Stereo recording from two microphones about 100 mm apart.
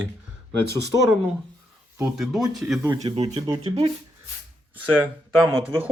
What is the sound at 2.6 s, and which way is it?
Speech, 15° right (ahead or behind).